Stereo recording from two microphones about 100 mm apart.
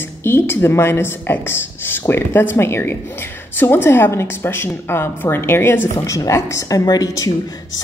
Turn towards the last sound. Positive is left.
turn(degrees=35)  # may be behind; listen again after turning